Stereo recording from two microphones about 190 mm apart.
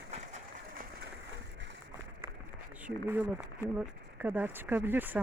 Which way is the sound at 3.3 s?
10° right (ahead or behind).